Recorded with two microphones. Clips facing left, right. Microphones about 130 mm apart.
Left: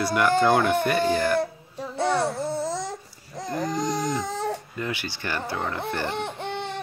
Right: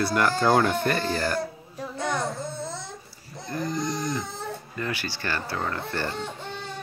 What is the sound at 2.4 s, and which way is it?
Babbling, 90° left.